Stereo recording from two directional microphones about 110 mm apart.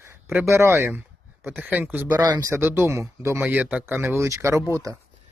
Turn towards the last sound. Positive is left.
turn(degrees=-30)  # may be behind; listen again after turning